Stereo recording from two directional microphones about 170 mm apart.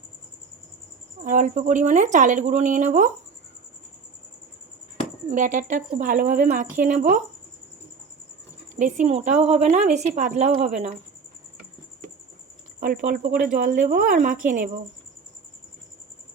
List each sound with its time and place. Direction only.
1.2 s speech: 50° right (ahead or behind)
5.3 s speech: 50° right (ahead or behind)
8.7 s a woman's voice: 45° right (ahead or behind)
12.8 s a woman's voice: 55° right (ahead or behind)